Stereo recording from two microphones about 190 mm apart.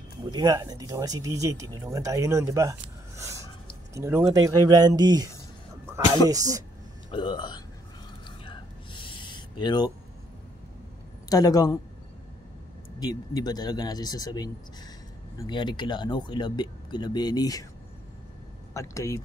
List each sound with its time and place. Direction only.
0.3 s speech: 20° right (ahead or behind)
7.1 s speech: 25° left (ahead or behind)
8.5 s a sound: 25° left (ahead or behind)
11.2 s speech: 20° left (ahead or behind)
13.0 s speech: 20° left (ahead or behind)
18.7 s speech: 15° left (ahead or behind)